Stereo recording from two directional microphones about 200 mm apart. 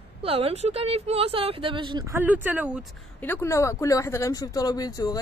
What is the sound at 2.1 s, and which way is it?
Speech, 10° right (ahead or behind).